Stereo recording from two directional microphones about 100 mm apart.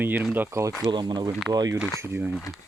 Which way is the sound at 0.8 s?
45° right (ahead or behind).